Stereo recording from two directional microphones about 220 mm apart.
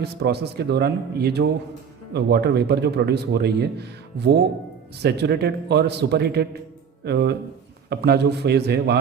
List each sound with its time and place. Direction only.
0.0 s a man's voice: 50° right (ahead or behind)